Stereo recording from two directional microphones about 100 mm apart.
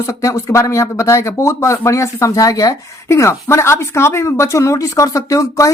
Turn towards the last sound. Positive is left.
turn(degrees=30)  # may be behind; listen again after turning